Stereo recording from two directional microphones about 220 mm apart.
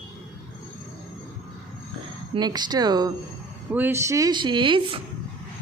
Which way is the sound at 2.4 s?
20° right (ahead or behind).